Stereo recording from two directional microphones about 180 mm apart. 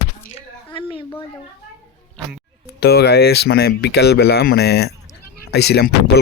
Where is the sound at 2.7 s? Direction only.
65° left (ahead or behind).